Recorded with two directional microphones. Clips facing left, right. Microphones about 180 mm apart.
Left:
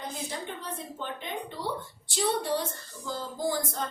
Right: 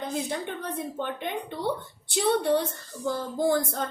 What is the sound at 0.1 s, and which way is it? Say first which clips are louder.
A woman's voice: right 6 dB; 60° right (ahead or behind).